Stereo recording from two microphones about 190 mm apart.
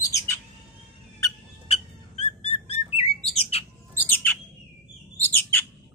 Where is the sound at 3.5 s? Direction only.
30° left (ahead or behind).